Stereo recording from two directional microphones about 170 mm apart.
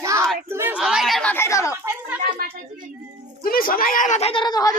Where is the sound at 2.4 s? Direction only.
60° right (ahead or behind).